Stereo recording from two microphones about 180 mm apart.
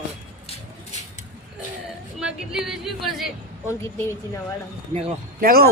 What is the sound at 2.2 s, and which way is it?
Speech, 5° right (ahead or behind).